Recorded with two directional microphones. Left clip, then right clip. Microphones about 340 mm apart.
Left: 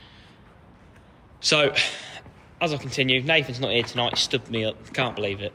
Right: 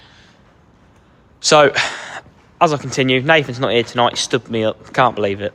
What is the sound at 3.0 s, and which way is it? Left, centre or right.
Speech, right.